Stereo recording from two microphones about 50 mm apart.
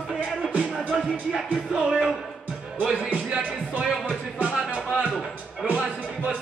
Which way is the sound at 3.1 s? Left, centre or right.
Right.